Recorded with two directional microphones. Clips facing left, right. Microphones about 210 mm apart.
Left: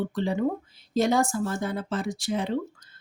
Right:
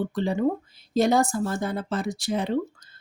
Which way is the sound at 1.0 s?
35° right (ahead or behind).